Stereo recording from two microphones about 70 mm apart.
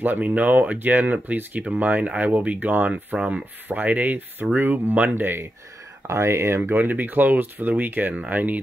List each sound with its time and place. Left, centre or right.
0.0 s speech: right
6.0 s speech: right